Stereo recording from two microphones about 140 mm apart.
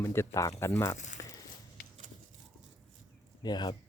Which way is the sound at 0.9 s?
60° left (ahead or behind).